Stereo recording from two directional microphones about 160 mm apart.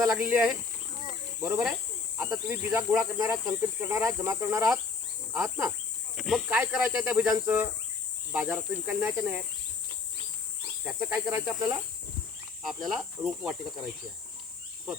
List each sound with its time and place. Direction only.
0.0 s cricket: 15° right (ahead or behind)
10.8 s cricket: 10° right (ahead or behind)
12.6 s cricket: centre (ahead or behind)